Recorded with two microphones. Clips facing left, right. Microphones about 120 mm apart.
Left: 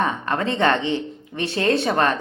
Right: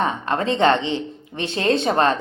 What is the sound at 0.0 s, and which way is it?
Speech, 25° right (ahead or behind).